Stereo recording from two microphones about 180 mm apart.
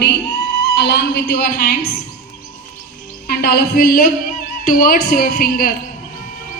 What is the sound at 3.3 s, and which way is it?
A woman's voice, 60° left (ahead or behind).